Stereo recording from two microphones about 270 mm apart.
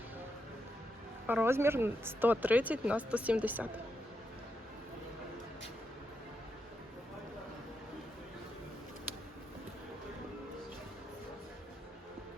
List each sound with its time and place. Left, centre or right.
1.3 s speech: centre